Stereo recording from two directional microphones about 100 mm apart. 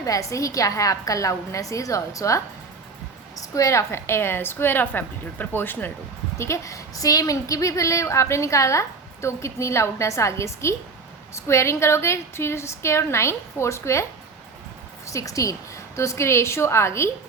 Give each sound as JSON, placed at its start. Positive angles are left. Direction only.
{"t": 0.0, "sound": "a woman's voice", "side_deg": 35}
{"t": 6.4, "sound": "a woman's voice", "side_deg": 30}
{"t": 15.0, "sound": "a woman's voice", "side_deg": 35}